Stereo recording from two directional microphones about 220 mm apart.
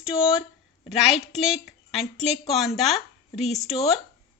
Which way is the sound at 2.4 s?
Centre (ahead or behind).